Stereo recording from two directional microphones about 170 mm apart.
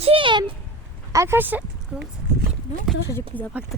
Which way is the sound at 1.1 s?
15° right (ahead or behind).